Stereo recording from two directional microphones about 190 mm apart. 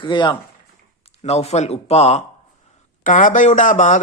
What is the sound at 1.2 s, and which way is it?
A man's voice, 35° left (ahead or behind).